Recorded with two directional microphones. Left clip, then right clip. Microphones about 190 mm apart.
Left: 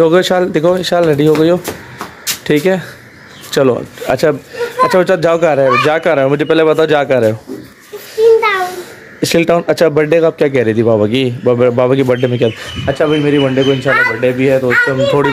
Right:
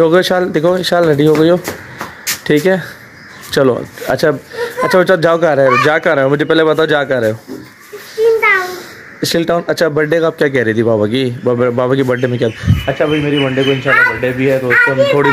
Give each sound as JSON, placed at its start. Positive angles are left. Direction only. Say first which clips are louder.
{"t": 0.0, "sound": "speech", "louder": "left 1 dB", "side_deg": 0}
{"t": 8.2, "sound": "a sound", "louder": "left 1 dB", "side_deg": 15}
{"t": 9.2, "sound": "speech", "louder": "left 3 dB", "side_deg": 10}
{"t": 13.3, "sound": "a child's voice", "louder": "left 2 dB", "side_deg": 15}